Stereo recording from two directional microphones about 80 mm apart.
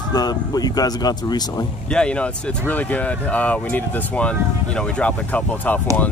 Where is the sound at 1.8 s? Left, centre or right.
Centre.